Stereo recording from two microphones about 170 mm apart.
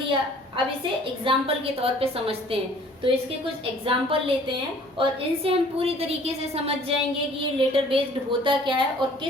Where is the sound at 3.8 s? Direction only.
35° right (ahead or behind).